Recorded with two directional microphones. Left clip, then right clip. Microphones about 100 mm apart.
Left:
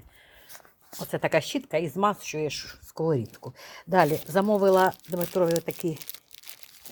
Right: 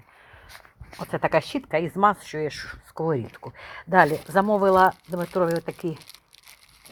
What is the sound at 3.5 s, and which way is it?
Speech, 30° left (ahead or behind).